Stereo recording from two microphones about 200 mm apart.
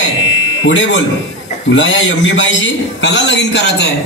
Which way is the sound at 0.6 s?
75° left (ahead or behind).